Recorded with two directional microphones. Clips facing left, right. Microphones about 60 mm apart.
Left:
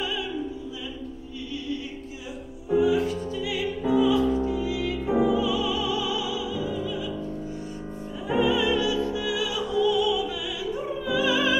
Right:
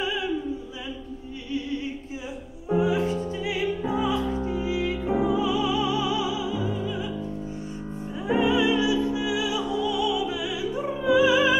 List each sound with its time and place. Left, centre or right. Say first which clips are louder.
0.0 s opera: right 2 dB; right
1.5 s music: right 4 dB; right
8.3 s music: right 1 dB; right